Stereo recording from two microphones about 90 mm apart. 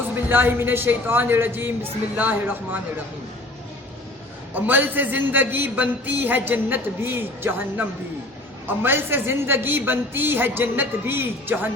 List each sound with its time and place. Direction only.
0.3 s a man's voice: 25° right (ahead or behind)
4.5 s a man's voice: 20° right (ahead or behind)